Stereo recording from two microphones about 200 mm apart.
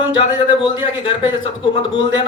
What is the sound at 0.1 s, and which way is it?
Speech, 25° left (ahead or behind).